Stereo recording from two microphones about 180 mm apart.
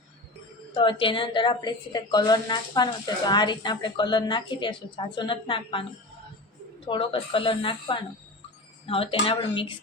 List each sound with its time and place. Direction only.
0.7 s a woman's voice: 25° left (ahead or behind)
6.8 s a woman's voice: 30° left (ahead or behind)